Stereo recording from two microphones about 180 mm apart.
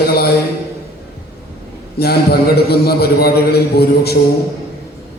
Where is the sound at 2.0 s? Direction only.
60° left (ahead or behind).